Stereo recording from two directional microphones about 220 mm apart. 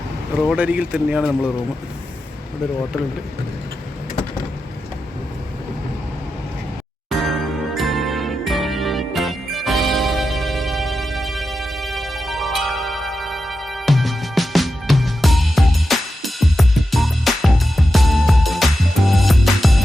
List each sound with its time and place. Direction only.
0.4 s speech: 5° right (ahead or behind)
7.1 s music: centre (ahead or behind)